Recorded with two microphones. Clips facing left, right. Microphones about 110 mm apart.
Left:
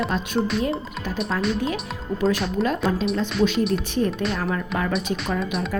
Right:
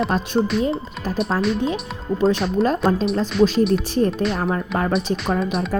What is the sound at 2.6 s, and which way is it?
Music, centre (ahead or behind).